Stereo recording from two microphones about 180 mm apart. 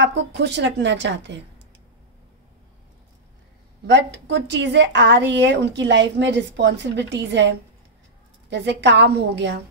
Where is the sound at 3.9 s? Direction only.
75° right (ahead or behind).